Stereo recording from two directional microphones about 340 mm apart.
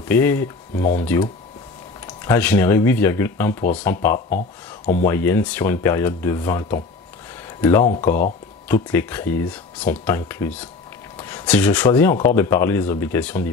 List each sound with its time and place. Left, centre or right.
0.1 s speech: centre
4.3 s speech: left
5.0 s speech: centre
8.6 s speech: centre